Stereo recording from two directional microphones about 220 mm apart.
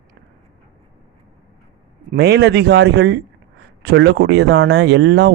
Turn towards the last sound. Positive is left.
turn(degrees=-50)  # may be behind; listen again after turning